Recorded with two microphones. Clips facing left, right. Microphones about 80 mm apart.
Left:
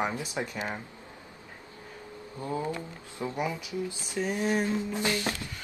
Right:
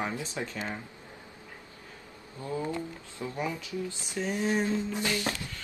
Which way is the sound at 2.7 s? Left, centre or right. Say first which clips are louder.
Right 1 dB; centre.